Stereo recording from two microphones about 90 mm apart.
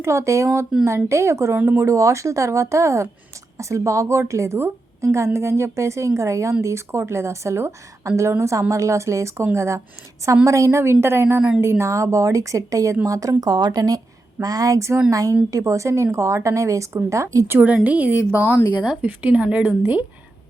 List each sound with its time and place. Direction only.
0.0 s a woman's voice: 30° right (ahead or behind)
17.8 s a woman's voice: 20° right (ahead or behind)